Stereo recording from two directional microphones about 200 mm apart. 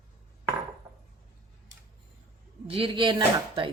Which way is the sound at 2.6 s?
25° right (ahead or behind).